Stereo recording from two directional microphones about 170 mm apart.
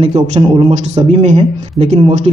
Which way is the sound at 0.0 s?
35° right (ahead or behind).